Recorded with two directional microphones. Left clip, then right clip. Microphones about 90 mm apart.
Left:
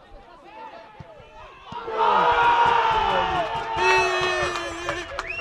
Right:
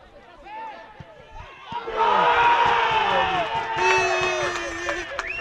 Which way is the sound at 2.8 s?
25° right (ahead or behind).